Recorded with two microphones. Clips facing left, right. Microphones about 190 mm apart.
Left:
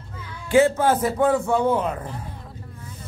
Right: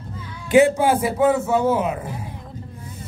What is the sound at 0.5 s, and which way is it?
A man's voice, 15° right (ahead or behind).